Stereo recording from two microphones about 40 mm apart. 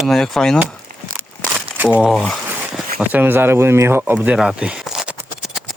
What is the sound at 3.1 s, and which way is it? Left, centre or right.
Speech, right.